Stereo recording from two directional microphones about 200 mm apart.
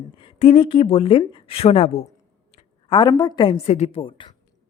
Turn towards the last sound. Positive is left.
turn(degrees=25)  # may be behind; listen again after turning